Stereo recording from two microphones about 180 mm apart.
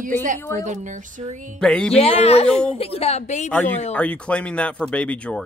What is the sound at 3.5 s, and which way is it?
Speech, 10° left (ahead or behind).